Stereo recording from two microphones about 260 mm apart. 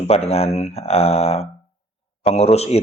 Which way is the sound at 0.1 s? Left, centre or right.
Left.